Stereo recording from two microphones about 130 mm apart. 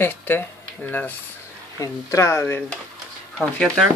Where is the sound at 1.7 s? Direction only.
25° left (ahead or behind).